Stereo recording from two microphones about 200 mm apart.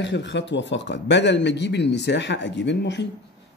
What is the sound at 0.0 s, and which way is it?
Speech, 60° left (ahead or behind).